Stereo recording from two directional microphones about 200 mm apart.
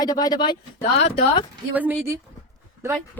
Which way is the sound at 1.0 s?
30° left (ahead or behind).